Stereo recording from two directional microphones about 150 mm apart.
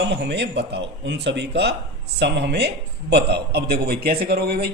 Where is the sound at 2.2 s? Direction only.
90° right.